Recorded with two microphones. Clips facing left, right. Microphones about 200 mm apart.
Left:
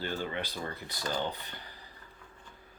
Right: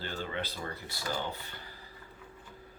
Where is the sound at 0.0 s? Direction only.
15° left (ahead or behind).